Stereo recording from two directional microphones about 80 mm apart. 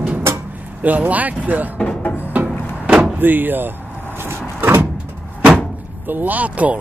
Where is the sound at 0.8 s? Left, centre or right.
Centre.